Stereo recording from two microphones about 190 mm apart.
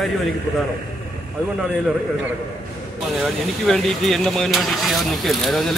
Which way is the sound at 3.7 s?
Centre (ahead or behind).